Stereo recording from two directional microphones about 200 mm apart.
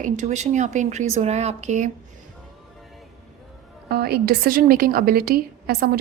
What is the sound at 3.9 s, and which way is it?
A woman's voice, 50° right (ahead or behind).